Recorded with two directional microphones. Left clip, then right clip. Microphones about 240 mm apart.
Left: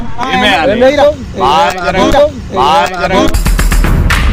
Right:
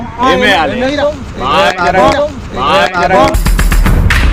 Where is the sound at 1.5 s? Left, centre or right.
Left.